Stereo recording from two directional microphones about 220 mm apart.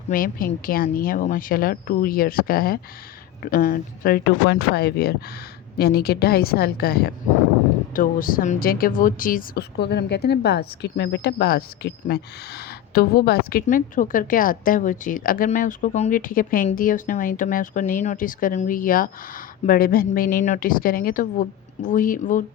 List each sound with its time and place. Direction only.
0.1 s speech: 40° left (ahead or behind)